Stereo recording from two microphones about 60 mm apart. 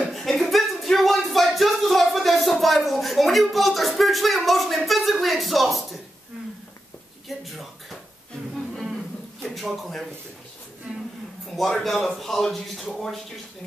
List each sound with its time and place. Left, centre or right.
0.0 s music: centre
7.2 s a sound: centre
11.5 s speech: centre